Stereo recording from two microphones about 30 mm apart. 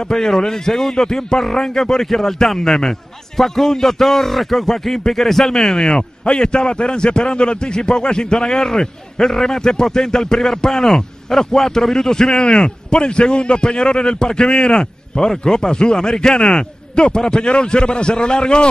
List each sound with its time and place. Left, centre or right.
0.0 s a man's voice: centre
5.9 s a man's voice: left
8.6 s a man's voice: centre